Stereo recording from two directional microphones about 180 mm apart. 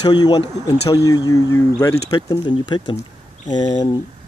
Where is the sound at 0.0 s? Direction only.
25° left (ahead or behind).